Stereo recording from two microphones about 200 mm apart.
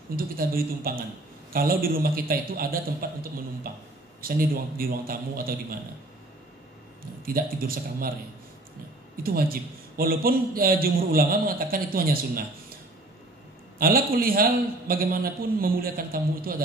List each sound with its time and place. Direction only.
0.1 s a man's voice: 45° right (ahead or behind)
7.2 s a man's voice: 45° right (ahead or behind)
9.1 s a man's voice: 45° right (ahead or behind)
13.7 s a man's voice: 45° right (ahead or behind)